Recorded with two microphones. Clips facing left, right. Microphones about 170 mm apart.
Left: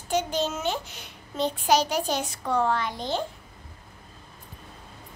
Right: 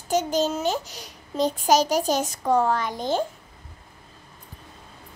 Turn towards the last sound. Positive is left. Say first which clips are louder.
# right 4 dB
turn(degrees=-45)  # may be behind; listen again after turning